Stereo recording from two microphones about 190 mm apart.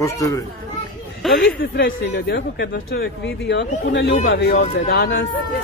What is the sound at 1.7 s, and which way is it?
Speech, 60° left (ahead or behind).